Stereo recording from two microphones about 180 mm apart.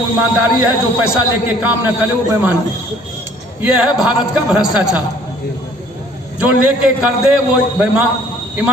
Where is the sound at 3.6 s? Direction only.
5° right (ahead or behind).